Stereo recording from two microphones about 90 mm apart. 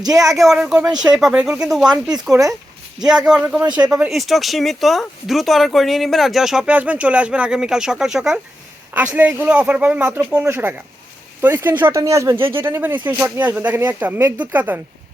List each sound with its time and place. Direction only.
0.0 s speech: 40° right (ahead or behind)
0.3 s speech: centre (ahead or behind)
2.3 s speech: 40° right (ahead or behind)
3.0 s speech: 5° right (ahead or behind)
8.9 s speech: 20° right (ahead or behind)
10.5 s speech: 25° right (ahead or behind)
11.9 s speech: 35° right (ahead or behind); by 14.8 s 15° right (ahead or behind)